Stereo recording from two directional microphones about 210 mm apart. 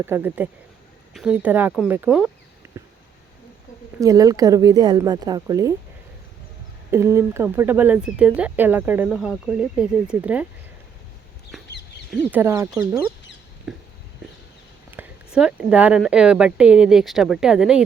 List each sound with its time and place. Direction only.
0.0 s speech: 10° right (ahead or behind)
2.6 s a sound: 15° right (ahead or behind)
4.0 s speech: 15° right (ahead or behind)
6.9 s speech: 10° right (ahead or behind)
12.1 s speech: 10° right (ahead or behind)
14.8 s speech: 10° right (ahead or behind)